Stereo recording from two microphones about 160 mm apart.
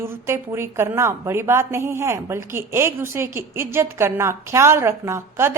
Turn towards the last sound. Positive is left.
turn(degrees=-15)  # may be behind; listen again after turning